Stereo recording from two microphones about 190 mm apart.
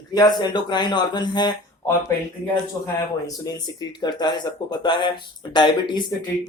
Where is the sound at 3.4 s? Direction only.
20° left (ahead or behind).